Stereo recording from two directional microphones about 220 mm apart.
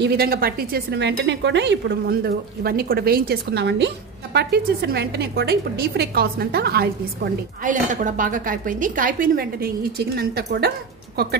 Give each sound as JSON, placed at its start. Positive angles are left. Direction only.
{"t": 0.0, "sound": "a woman's voice", "side_deg": -45}